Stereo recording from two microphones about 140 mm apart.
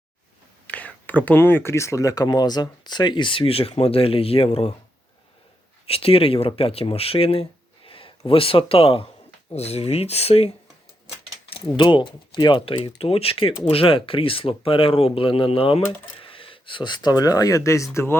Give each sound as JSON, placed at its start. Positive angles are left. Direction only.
{"t": 0.7, "sound": "speech", "side_deg": 10}
{"t": 5.8, "sound": "speech", "side_deg": 45}
{"t": 7.9, "sound": "a sound", "side_deg": 40}
{"t": 8.3, "sound": "speech", "side_deg": 40}
{"t": 11.4, "sound": "mechanisms", "side_deg": 40}
{"t": 11.8, "sound": "speech", "side_deg": 35}